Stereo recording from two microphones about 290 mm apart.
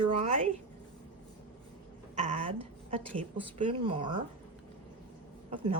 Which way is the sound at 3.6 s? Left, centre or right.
Centre.